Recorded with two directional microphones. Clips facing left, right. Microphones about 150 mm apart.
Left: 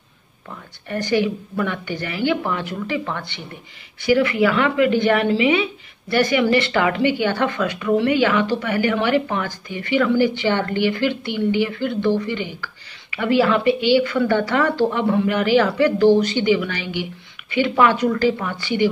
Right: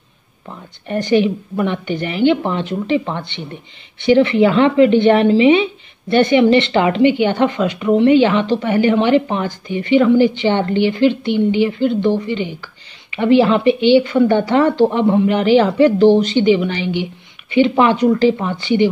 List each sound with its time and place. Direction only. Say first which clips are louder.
0.5 s a woman's voice: right 4 dB; 20° right (ahead or behind)